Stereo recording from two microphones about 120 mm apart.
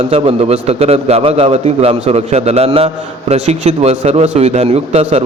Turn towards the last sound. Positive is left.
turn(degrees=-60)  # may be behind; listen again after turning